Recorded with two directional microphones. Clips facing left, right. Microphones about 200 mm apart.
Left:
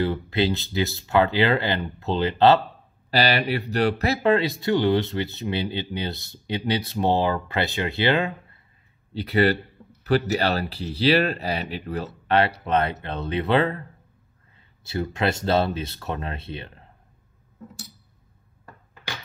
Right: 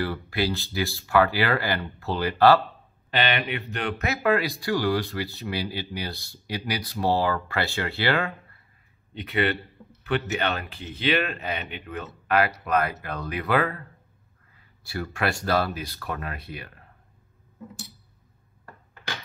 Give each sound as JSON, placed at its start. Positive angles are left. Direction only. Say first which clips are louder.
{"t": 0.0, "sound": "speech", "louder": "left 4 dB", "side_deg": 20}
{"t": 3.1, "sound": "speech", "louder": "left 4 dB", "side_deg": 35}
{"t": 9.1, "sound": "speech", "louder": "left 5 dB", "side_deg": 35}